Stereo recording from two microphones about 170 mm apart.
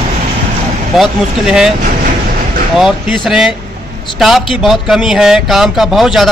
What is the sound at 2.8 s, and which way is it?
A man's voice, centre (ahead or behind).